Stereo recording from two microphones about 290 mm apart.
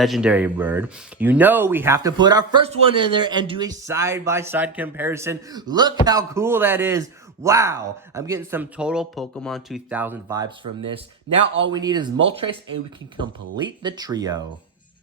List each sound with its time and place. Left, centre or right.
0.0 s speech: centre
13.8 s speech: centre